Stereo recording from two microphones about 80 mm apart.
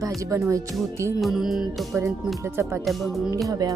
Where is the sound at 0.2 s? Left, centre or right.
Right.